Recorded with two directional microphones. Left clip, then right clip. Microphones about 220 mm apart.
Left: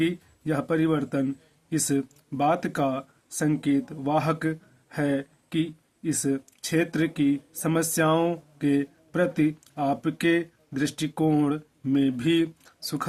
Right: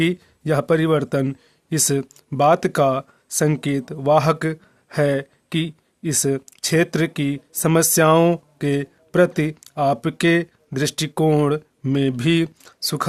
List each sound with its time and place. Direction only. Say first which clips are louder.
0.0 s speech: right 5 dB; 50° right (ahead or behind)